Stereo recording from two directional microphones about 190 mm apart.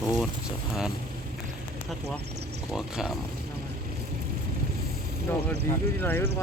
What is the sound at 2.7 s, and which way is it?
Speech, centre (ahead or behind).